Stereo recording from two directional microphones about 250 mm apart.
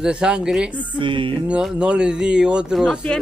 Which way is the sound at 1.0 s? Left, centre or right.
Centre.